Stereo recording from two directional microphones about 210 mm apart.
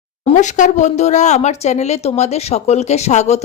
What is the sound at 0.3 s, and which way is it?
Speech, 35° left (ahead or behind).